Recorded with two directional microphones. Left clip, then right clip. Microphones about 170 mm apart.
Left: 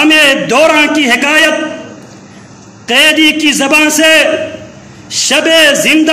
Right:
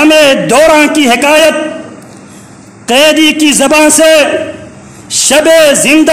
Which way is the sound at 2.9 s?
50° right (ahead or behind).